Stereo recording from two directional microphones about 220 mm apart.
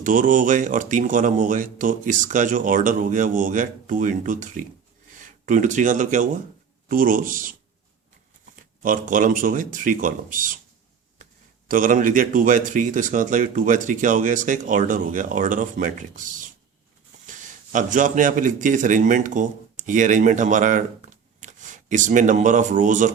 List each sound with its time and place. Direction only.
0.0 s speech: 35° right (ahead or behind)
8.8 s speech: 40° right (ahead or behind)
11.7 s a man's voice: 35° right (ahead or behind)